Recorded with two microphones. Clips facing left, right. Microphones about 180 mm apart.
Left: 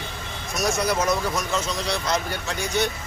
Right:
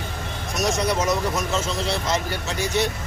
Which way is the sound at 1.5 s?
25° right (ahead or behind).